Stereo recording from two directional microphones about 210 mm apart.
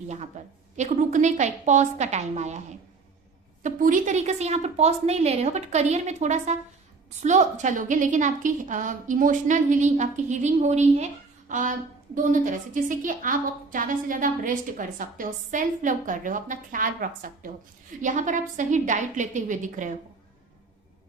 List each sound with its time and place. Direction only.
0.4 s a woman's voice: 35° right (ahead or behind)
3.6 s a woman's voice: 40° right (ahead or behind)